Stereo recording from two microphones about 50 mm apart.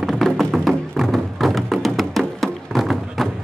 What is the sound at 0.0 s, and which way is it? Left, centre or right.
Music, centre.